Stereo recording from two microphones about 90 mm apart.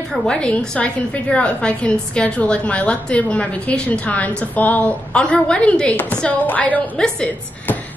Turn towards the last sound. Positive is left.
turn(degrees=20)  # may be behind; listen again after turning